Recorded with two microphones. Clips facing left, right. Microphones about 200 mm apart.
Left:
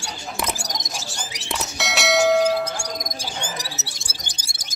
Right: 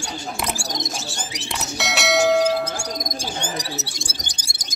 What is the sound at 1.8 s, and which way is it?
Clang, centre (ahead or behind).